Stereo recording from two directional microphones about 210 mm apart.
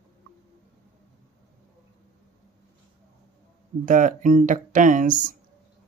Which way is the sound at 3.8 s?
40° right (ahead or behind).